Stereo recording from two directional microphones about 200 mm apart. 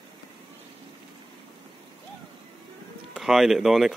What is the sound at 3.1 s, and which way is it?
Speech, centre (ahead or behind).